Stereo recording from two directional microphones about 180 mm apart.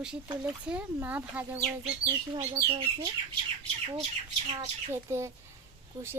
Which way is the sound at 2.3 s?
25° right (ahead or behind).